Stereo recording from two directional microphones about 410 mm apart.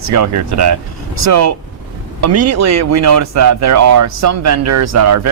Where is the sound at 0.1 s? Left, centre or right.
Right.